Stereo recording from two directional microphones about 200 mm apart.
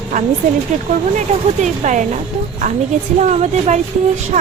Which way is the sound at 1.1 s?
35° right (ahead or behind).